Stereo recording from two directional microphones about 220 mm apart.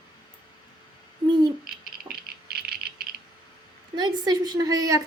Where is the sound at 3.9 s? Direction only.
20° right (ahead or behind).